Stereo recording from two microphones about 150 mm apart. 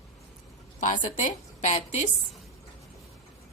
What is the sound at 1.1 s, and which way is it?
A woman's voice, 50° left (ahead or behind).